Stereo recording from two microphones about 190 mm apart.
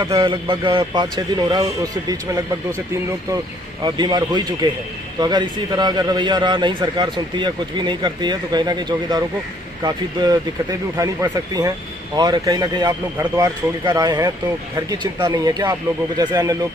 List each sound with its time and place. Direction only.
0.0 s a man's voice: 25° right (ahead or behind)
3.8 s a man's voice: 20° right (ahead or behind)